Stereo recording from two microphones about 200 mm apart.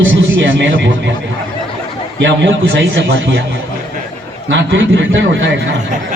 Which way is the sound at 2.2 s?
65° right (ahead or behind).